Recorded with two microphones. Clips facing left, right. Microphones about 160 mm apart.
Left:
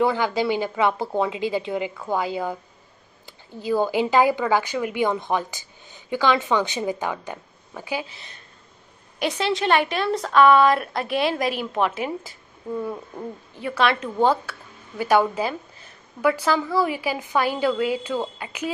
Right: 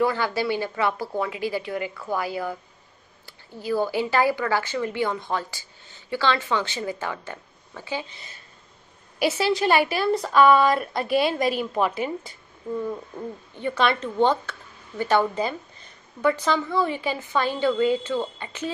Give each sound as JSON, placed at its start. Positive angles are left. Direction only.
{"t": 0.0, "sound": "a woman's voice", "side_deg": 15}
{"t": 9.2, "sound": "a woman's voice", "side_deg": -5}
{"t": 13.6, "sound": "speech", "side_deg": 5}